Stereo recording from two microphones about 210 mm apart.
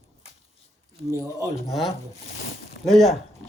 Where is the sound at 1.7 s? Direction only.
Centre (ahead or behind).